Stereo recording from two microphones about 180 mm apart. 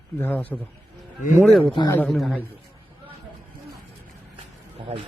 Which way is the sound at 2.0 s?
Centre (ahead or behind).